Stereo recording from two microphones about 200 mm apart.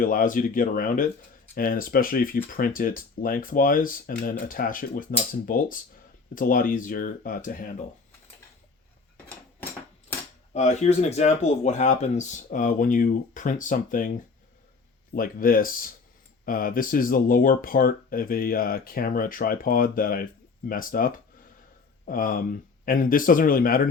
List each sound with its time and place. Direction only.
0.0 s speech: 45° left (ahead or behind)
10.5 s speech: 35° left (ahead or behind)
15.1 s speech: 45° left (ahead or behind)